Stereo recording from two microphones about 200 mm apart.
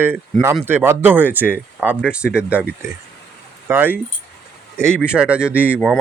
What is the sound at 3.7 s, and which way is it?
Speech, 10° right (ahead or behind).